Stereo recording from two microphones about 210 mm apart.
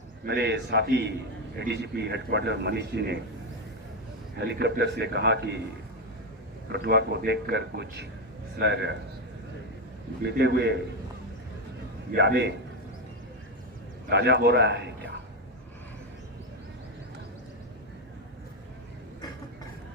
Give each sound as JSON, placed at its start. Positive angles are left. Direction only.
{"t": 0.3, "sound": "a man's voice", "side_deg": -55}
{"t": 4.4, "sound": "a man's voice", "side_deg": -55}
{"t": 6.7, "sound": "a man's voice", "side_deg": -50}
{"t": 10.2, "sound": "a man's voice", "side_deg": -55}
{"t": 12.1, "sound": "a man's voice", "side_deg": -55}
{"t": 14.1, "sound": "a man's voice", "side_deg": -55}